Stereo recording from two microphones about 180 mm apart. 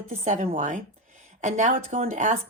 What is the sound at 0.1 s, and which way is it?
A woman's voice, 40° right (ahead or behind).